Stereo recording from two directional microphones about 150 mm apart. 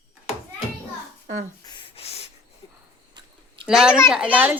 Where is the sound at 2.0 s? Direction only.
45° left (ahead or behind).